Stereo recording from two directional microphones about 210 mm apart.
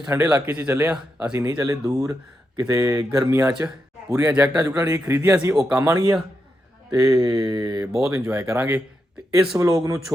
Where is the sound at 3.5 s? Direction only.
5° right (ahead or behind).